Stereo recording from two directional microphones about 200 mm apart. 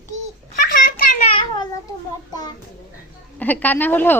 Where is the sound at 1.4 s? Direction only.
20° left (ahead or behind).